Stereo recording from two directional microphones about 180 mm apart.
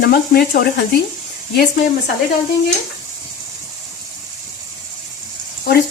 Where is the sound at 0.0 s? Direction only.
65° left (ahead or behind).